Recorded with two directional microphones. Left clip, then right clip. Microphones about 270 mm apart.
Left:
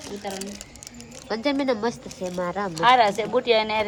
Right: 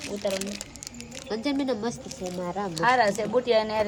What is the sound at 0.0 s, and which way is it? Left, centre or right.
A woman's voice, centre.